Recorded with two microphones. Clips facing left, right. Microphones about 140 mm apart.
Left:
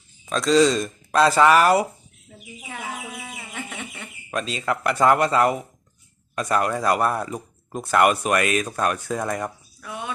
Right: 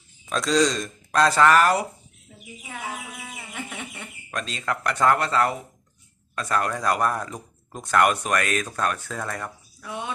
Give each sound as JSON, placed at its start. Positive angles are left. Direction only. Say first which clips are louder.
{"t": 0.3, "sound": "speech", "louder": "left 4 dB", "side_deg": 0}
{"t": 3.8, "sound": "speech", "louder": "left 1 dB", "side_deg": -15}
{"t": 4.3, "sound": "speech", "louder": "left 4 dB", "side_deg": 5}
{"t": 9.8, "sound": "speech", "louder": "even", "side_deg": -20}